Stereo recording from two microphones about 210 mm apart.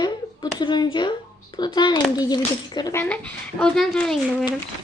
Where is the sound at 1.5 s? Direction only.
20° left (ahead or behind); by 4.4 s 5° left (ahead or behind).